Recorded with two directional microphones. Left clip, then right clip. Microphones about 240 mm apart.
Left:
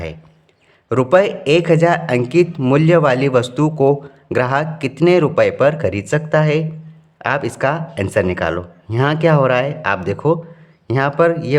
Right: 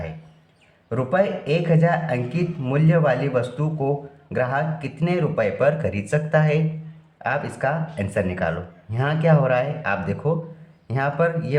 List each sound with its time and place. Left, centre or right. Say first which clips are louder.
0.9 s a man's voice: left 8 dB; left